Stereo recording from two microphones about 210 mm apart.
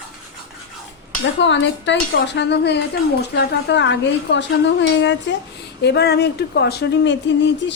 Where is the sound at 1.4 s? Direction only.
60° left (ahead or behind).